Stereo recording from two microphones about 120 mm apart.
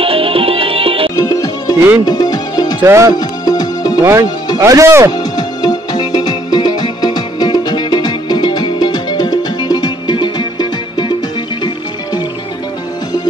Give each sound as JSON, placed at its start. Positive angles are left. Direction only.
{"t": 0.0, "sound": "music", "side_deg": -50}
{"t": 1.1, "sound": "music", "side_deg": 30}
{"t": 2.8, "sound": "speech", "side_deg": -20}
{"t": 3.2, "sound": "music", "side_deg": 35}
{"t": 4.0, "sound": "speech", "side_deg": -25}
{"t": 5.1, "sound": "music", "side_deg": 35}